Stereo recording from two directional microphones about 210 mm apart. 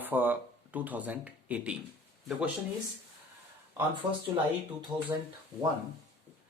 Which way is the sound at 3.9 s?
25° right (ahead or behind).